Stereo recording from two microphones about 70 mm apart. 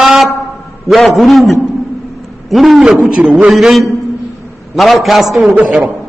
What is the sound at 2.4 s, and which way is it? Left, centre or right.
Hoot, centre.